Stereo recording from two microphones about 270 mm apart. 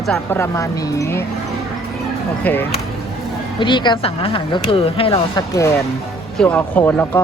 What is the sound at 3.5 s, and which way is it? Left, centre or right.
Speech, centre.